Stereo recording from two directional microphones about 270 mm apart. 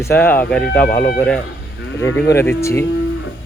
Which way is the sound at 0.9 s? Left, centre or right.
Left.